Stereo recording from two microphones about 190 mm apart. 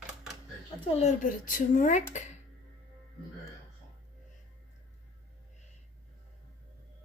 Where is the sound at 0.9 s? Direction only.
40° left (ahead or behind).